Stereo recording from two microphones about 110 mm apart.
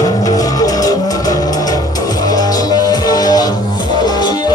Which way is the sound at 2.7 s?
35° left (ahead or behind).